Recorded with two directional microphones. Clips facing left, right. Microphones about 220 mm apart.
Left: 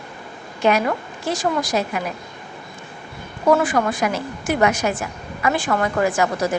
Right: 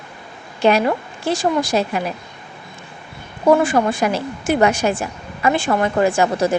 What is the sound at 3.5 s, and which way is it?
A woman's voice, 25° right (ahead or behind).